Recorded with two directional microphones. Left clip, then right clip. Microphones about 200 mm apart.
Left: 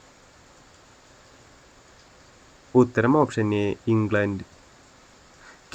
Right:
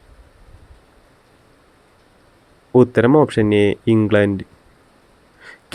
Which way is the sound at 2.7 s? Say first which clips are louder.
Right 7 dB; 40° right (ahead or behind).